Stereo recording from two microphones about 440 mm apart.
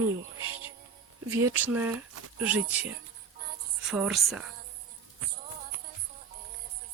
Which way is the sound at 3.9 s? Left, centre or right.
Centre.